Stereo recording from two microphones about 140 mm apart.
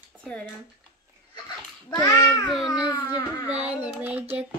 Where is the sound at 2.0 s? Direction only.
30° left (ahead or behind).